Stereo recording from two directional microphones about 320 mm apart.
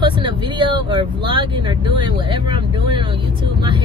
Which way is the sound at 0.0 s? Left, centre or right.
Centre.